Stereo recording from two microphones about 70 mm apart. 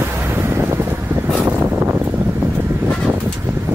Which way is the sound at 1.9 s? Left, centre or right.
Right.